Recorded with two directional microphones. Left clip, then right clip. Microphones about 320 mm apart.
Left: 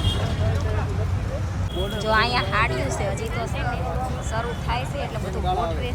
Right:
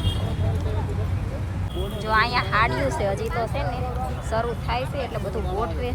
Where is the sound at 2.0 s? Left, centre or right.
Centre.